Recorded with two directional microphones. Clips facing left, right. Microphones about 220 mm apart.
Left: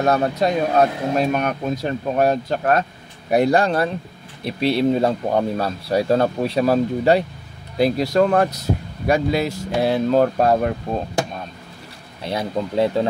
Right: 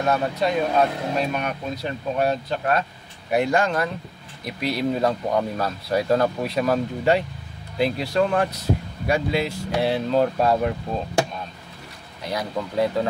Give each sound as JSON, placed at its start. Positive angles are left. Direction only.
{"t": 0.0, "sound": "speech", "side_deg": 40}
{"t": 12.3, "sound": "speech", "side_deg": 25}